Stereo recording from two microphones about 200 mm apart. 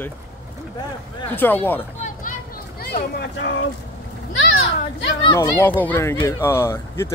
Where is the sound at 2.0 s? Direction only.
40° left (ahead or behind); by 3.6 s 65° left (ahead or behind).